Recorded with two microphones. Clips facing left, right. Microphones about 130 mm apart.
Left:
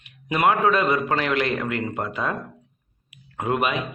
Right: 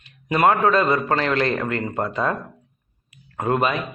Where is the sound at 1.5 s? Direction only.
35° right (ahead or behind).